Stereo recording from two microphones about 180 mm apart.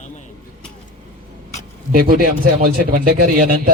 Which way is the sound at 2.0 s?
55° right (ahead or behind).